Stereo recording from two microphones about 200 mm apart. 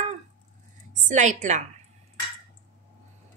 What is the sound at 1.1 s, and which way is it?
Speech, 40° right (ahead or behind).